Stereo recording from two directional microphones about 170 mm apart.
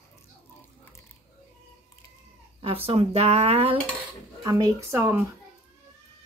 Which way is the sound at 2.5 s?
35° right (ahead or behind).